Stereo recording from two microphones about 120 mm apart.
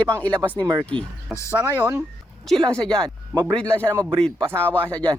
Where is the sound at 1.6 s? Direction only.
20° right (ahead or behind).